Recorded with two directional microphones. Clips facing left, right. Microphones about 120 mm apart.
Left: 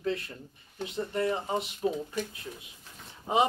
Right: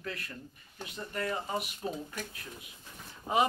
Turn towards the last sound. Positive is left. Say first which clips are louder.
# left 2 dB
turn(degrees=20)  # may be behind; listen again after turning